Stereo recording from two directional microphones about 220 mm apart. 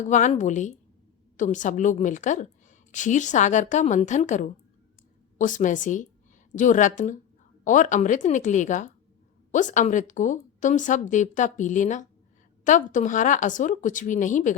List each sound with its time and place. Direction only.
0.1 s a woman's voice: 35° left (ahead or behind)